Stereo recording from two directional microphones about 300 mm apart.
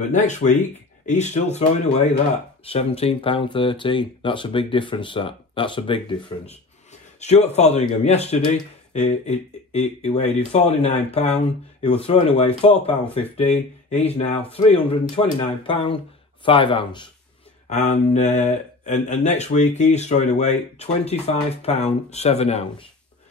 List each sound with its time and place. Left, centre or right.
0.1 s speech: left